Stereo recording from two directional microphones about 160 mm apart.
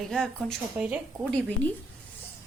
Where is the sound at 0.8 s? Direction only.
5° right (ahead or behind).